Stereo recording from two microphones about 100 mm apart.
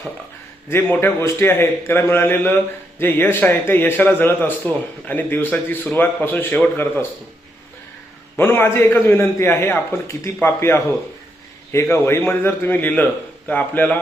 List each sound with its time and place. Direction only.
0.7 s speech: 20° left (ahead or behind)
8.4 s speech: 20° left (ahead or behind)